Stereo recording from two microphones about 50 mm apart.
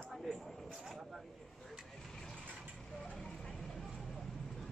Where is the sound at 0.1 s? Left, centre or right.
Centre.